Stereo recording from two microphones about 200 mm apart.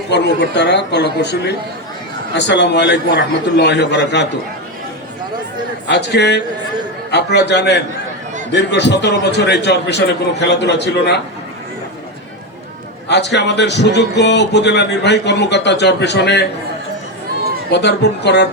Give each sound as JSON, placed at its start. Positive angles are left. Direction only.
{"t": 0.1, "sound": "speech", "side_deg": 60}
{"t": 5.9, "sound": "speech", "side_deg": 60}
{"t": 13.1, "sound": "speech", "side_deg": 60}
{"t": 17.7, "sound": "speech", "side_deg": 60}